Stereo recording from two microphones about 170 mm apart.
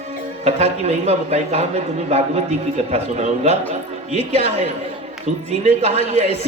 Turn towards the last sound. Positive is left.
turn(degrees=-40)  # may be behind; listen again after turning